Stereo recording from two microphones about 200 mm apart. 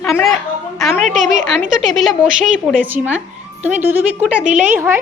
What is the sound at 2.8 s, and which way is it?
Speech, 10° right (ahead or behind).